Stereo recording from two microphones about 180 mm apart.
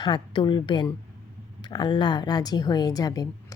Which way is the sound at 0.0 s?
25° left (ahead or behind).